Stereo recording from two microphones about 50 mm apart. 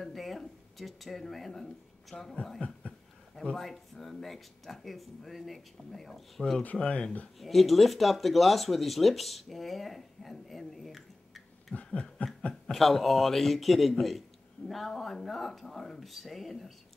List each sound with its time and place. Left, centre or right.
0.0 s a sound: centre
0.7 s speech: centre
2.6 s speech: left
3.5 s speech: centre
6.8 s speech: centre
7.3 s speech: centre
11.7 s a sound: left
12.7 s speech: centre